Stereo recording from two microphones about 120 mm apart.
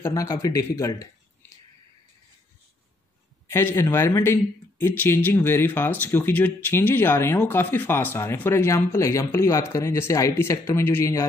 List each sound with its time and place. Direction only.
0.0 s a man's voice: 25° left (ahead or behind)
3.4 s a man's voice: 20° left (ahead or behind)